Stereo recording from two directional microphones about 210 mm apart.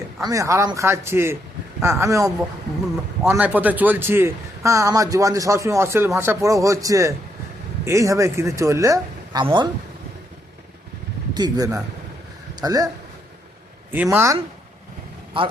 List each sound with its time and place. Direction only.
0.3 s a man's voice: 15° right (ahead or behind)
11.3 s a man's voice: 20° right (ahead or behind)
13.9 s a man's voice: 10° right (ahead or behind)